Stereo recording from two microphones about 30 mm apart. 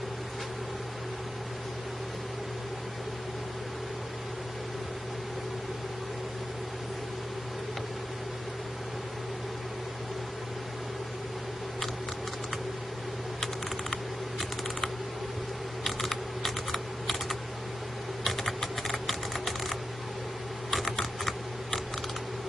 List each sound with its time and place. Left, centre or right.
15.8 s typing: centre
20.7 s typing: centre